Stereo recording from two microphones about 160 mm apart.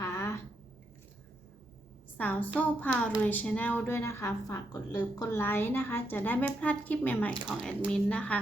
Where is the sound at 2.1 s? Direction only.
10° left (ahead or behind).